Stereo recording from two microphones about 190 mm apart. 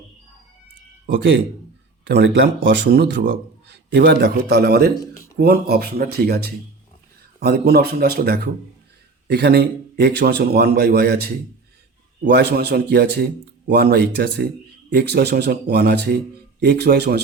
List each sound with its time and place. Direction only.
2.0 s a man's voice: 60° right (ahead or behind)
12.3 s a man's voice: 60° right (ahead or behind)